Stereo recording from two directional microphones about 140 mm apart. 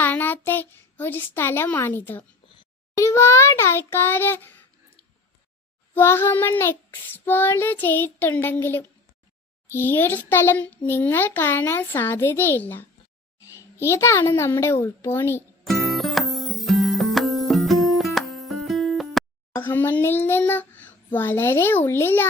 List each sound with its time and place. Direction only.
0.0 s a child's voice: 15° left (ahead or behind)
2.9 s child singing: 20° left (ahead or behind)
5.9 s child singing: 15° left (ahead or behind)
15.6 s music: centre (ahead or behind)
19.5 s child singing: 15° left (ahead or behind)